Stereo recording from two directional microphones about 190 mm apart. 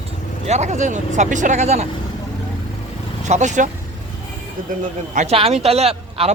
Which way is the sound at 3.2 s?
40° right (ahead or behind).